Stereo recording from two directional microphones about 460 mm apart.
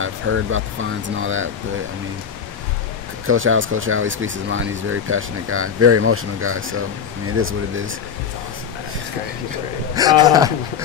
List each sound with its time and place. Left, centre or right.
0.0 s speech: right
3.3 s speech: right
9.9 s a man's voice: centre